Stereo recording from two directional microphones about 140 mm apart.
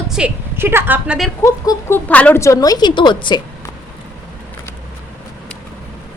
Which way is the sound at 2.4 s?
25° left (ahead or behind).